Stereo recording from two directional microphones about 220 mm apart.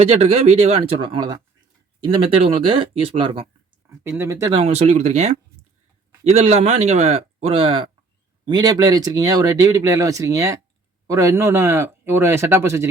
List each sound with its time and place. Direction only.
0.0 s speech: 30° right (ahead or behind)
3.8 s a sound: 10° right (ahead or behind)
4.2 s speech: 15° right (ahead or behind)